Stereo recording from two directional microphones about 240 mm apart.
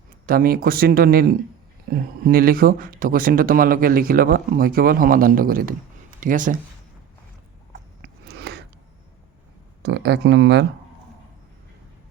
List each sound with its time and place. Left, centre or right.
0.3 s speech: right
8.0 s a sound: right
9.8 s speech: right